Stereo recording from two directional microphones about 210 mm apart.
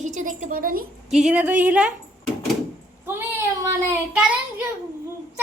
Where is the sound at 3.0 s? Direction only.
10° right (ahead or behind).